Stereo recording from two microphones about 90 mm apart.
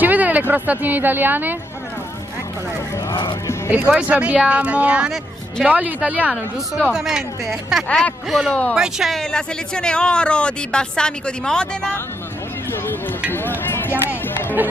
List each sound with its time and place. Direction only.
0.0 s a woman's voice: 20° right (ahead or behind)
3.1 s speech: 55° left (ahead or behind)
3.7 s speech: 10° right (ahead or behind)
6.9 s speech: 5° right (ahead or behind)
13.3 s a sound: 25° left (ahead or behind)